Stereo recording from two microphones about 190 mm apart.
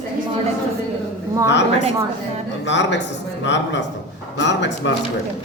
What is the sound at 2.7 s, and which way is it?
Speech, 70° left (ahead or behind).